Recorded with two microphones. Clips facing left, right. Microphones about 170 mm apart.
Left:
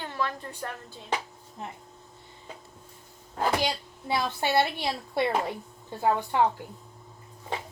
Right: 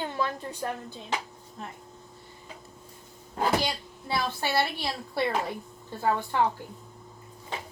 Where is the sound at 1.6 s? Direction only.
20° left (ahead or behind).